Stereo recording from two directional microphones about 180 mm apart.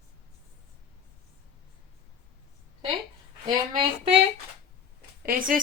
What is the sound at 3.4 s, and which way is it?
Speech, 25° right (ahead or behind).